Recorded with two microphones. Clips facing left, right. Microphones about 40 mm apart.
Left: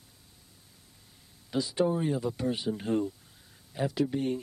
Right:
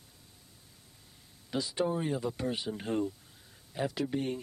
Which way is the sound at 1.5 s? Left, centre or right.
Centre.